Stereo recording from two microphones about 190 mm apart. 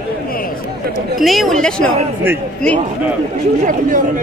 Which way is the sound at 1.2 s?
Centre (ahead or behind).